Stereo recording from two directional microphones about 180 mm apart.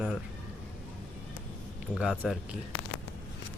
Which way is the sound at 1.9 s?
5° right (ahead or behind).